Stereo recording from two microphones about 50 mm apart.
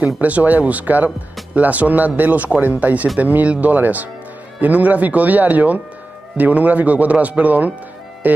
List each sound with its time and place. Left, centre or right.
0.0 s speech: right